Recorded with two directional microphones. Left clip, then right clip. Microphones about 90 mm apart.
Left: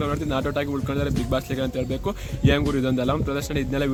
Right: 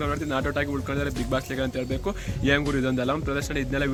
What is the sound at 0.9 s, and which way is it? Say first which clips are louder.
Speech: left 2 dB; 25° left (ahead or behind).